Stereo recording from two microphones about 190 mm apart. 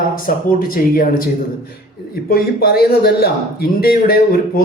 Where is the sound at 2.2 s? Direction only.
55° left (ahead or behind).